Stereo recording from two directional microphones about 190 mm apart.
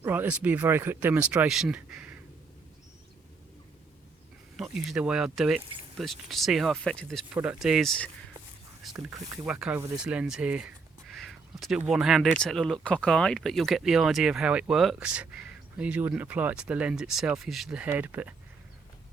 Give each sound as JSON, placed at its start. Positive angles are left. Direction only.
{"t": 0.0, "sound": "speech", "side_deg": -10}
{"t": 4.5, "sound": "speech", "side_deg": 0}
{"t": 9.1, "sound": "speech", "side_deg": -20}
{"t": 9.5, "sound": "speech", "side_deg": -5}
{"t": 11.1, "sound": "a sound", "side_deg": 0}
{"t": 11.8, "sound": "speech", "side_deg": -5}